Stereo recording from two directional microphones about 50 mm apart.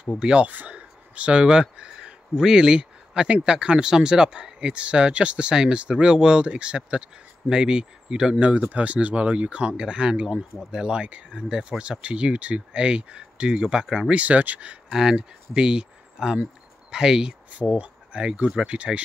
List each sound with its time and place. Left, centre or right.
0.2 s speech: centre
0.5 s speech: right; by 8.4 s centre
8.4 s speech: right
14.2 s speech: right
14.9 s speech: centre
17.5 s speech: right